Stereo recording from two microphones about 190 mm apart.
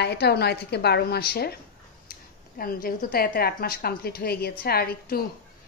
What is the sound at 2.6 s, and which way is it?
A woman's voice, 50° left (ahead or behind).